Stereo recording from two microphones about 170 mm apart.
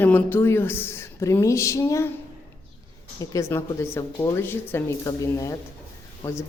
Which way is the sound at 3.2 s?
20° left (ahead or behind).